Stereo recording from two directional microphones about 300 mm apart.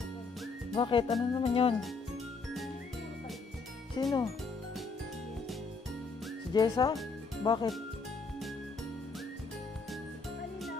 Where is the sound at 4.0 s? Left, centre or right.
Centre.